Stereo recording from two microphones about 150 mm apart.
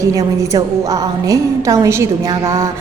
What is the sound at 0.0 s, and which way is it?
A woman's voice, 20° right (ahead or behind).